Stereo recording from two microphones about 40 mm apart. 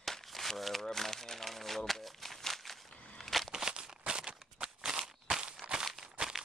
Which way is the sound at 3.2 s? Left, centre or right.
Centre.